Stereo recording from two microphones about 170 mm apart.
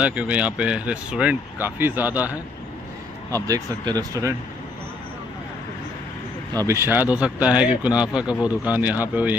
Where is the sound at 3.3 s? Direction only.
20° right (ahead or behind).